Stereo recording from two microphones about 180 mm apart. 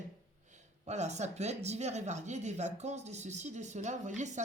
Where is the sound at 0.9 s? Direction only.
40° right (ahead or behind).